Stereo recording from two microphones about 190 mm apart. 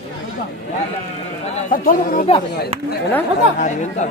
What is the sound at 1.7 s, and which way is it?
Speech, 45° left (ahead or behind).